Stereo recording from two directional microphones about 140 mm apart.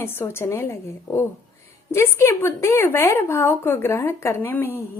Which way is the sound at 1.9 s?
20° left (ahead or behind).